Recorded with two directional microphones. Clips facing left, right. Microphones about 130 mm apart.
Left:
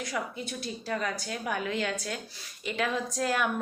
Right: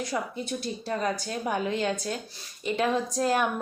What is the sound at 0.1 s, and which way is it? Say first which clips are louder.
A woman's voice: right 3 dB; 25° right (ahead or behind).